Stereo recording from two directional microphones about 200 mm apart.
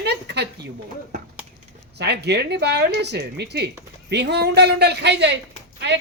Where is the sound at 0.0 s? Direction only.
55° right (ahead or behind).